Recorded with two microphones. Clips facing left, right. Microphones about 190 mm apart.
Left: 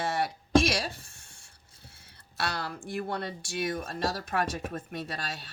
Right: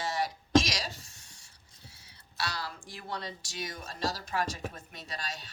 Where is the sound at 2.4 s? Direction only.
55° left (ahead or behind).